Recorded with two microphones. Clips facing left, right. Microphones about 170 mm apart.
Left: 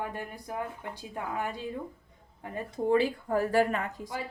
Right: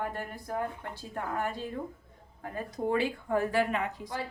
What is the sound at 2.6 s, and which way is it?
Speech, 30° left (ahead or behind).